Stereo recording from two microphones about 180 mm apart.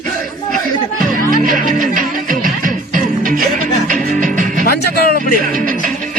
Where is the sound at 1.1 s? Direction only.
50° right (ahead or behind).